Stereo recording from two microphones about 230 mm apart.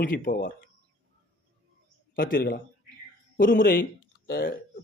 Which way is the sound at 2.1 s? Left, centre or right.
Left.